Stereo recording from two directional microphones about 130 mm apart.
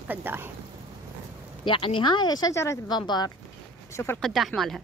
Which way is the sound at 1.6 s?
40° left (ahead or behind).